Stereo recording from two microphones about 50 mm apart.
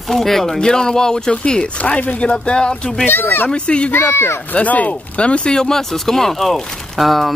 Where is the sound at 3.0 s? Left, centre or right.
Left.